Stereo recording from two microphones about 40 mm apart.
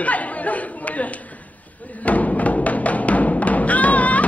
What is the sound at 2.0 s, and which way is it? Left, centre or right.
Music, left.